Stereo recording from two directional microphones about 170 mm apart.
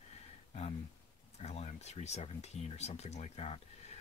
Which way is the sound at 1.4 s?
40° left (ahead or behind).